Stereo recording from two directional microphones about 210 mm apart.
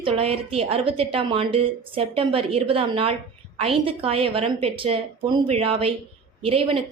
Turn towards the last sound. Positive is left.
turn(degrees=-25)  # may be behind; listen again after turning